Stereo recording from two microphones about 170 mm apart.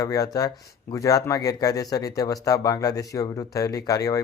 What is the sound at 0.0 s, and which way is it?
Speech, 20° left (ahead or behind).